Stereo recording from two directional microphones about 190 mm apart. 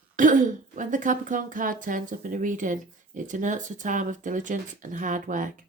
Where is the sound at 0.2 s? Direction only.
45° right (ahead or behind).